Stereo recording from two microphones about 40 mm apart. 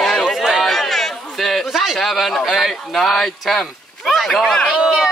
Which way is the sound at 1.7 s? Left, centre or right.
Centre.